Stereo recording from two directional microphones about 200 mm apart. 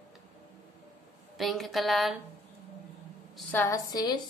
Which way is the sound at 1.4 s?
Centre (ahead or behind).